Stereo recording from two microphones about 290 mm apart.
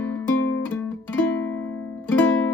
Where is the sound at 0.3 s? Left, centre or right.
Left.